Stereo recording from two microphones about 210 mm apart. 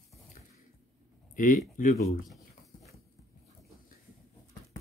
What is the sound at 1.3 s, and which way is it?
Speech, 40° left (ahead or behind).